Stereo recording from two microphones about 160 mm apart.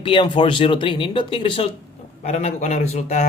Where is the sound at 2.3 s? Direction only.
45° left (ahead or behind).